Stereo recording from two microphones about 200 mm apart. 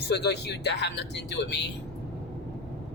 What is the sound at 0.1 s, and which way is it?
Speech, 55° left (ahead or behind).